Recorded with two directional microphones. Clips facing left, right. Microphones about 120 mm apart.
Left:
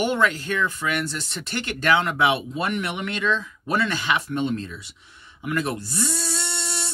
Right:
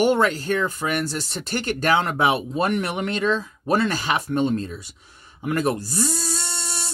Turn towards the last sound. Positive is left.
turn(degrees=-40)  # may be behind; listen again after turning